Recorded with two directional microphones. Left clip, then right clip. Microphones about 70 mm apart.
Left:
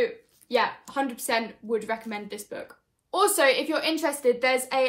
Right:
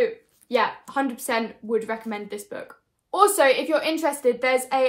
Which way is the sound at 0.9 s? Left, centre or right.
Right.